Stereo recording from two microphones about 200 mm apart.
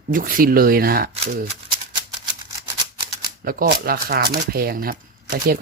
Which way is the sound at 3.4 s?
45° right (ahead or behind).